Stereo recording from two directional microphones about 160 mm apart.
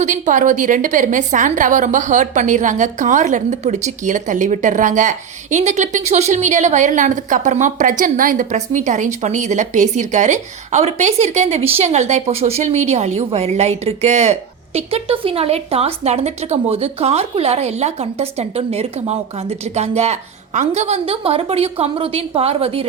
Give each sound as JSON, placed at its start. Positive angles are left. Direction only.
{"t": 0.0, "sound": "a woman's voice", "side_deg": -50}